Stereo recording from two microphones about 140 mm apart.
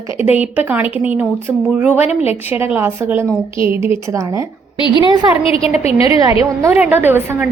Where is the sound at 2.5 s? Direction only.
15° right (ahead or behind).